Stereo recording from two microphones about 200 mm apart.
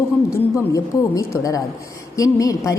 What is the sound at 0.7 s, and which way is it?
A woman's voice, 15° left (ahead or behind).